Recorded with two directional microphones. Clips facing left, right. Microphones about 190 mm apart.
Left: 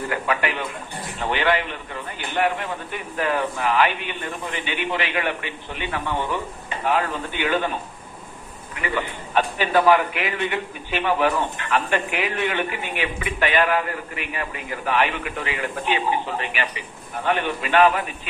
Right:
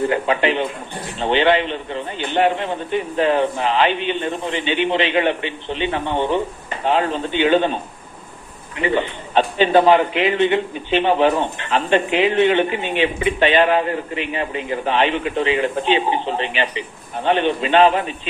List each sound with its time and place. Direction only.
0.1 s a man's voice: 25° right (ahead or behind)